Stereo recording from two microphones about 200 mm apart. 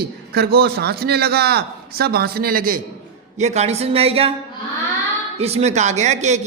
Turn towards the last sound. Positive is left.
turn(degrees=-35)  # may be behind; listen again after turning